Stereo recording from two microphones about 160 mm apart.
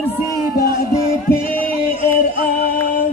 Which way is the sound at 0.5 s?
65° left (ahead or behind).